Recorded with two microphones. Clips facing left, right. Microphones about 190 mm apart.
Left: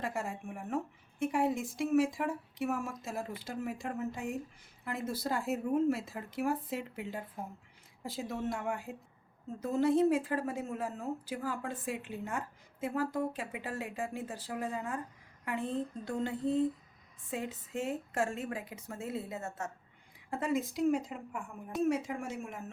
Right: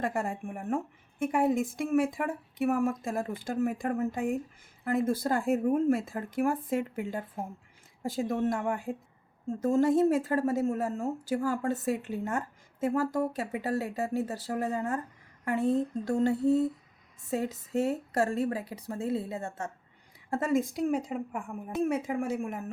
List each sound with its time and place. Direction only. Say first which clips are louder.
0.0 s a woman's voice: right 6 dB; 50° right (ahead or behind); by 19.7 s 30° right (ahead or behind)
20.3 s speech: right 5 dB; 45° right (ahead or behind)
21.8 s speech: right 3 dB; 55° right (ahead or behind)